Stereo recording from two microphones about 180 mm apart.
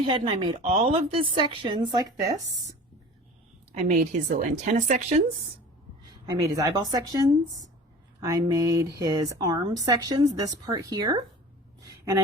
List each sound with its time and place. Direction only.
0.0 s speech: 30° right (ahead or behind)
3.7 s speech: 40° right (ahead or behind)
6.2 s speech: 20° right (ahead or behind)